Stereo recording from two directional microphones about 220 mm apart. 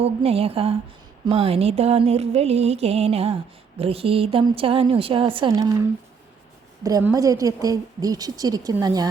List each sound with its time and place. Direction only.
0.0 s music: 25° right (ahead or behind)
6.8 s a woman's voice: 15° right (ahead or behind)